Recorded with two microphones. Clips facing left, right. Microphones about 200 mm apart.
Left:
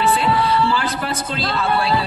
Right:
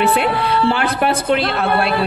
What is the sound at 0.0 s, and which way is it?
A woman's voice, 60° right (ahead or behind).